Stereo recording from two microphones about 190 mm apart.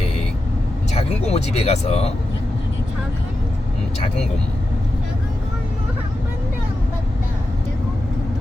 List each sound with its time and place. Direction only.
0.9 s speech: 35° left (ahead or behind)